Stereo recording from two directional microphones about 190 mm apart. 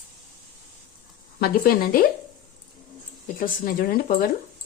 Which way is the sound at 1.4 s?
50° left (ahead or behind).